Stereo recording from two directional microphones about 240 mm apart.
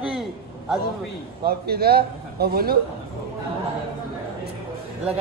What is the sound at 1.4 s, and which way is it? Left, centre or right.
A man's voice, right.